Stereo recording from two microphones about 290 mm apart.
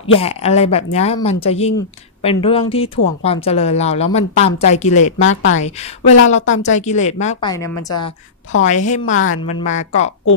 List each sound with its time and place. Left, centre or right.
0.2 s a woman's voice: left
8.5 s a woman's voice: left